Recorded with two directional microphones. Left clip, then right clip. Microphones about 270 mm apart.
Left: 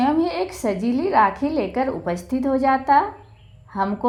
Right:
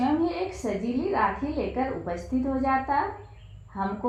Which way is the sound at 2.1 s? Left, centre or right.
Left.